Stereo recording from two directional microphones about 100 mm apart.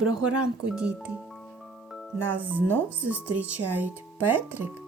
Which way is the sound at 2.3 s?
15° right (ahead or behind).